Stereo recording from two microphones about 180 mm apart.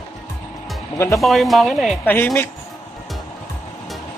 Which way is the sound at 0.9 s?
15° left (ahead or behind).